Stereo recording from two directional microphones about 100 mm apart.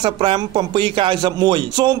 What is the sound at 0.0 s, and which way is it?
A man's voice, 50° right (ahead or behind).